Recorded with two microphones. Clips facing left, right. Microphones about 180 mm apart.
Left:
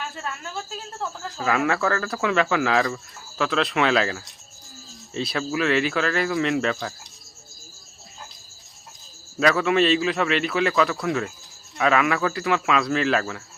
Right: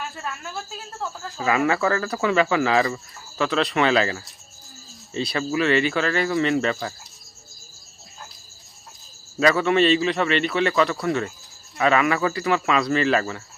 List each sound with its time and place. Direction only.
1.4 s speech: 5° right (ahead or behind)
9.4 s speech: centre (ahead or behind)